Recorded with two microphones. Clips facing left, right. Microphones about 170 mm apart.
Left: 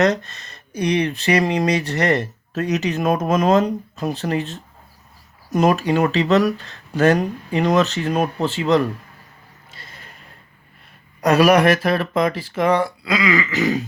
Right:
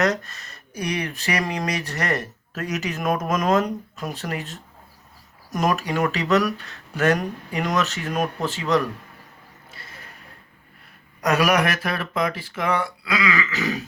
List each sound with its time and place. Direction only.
0.0 s speech: 30° left (ahead or behind)
11.2 s speech: 30° left (ahead or behind)